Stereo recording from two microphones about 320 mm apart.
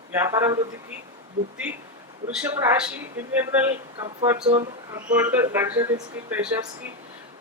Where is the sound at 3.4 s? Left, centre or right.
Centre.